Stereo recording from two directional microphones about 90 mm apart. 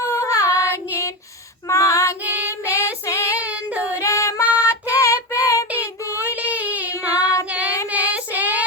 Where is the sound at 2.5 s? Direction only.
30° left (ahead or behind).